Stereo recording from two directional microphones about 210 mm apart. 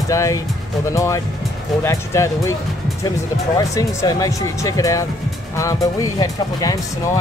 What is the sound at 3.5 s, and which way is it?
Speech, 15° left (ahead or behind).